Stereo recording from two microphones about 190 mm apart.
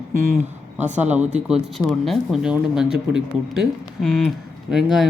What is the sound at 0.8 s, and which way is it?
Speech, 40° right (ahead or behind).